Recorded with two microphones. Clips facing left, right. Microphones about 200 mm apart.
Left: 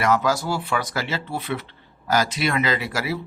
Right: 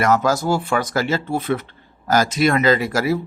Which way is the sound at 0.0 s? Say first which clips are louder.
Right 3 dB; 45° right (ahead or behind).